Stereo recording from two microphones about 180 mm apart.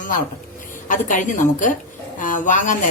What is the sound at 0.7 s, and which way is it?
A woman's voice, 45° left (ahead or behind).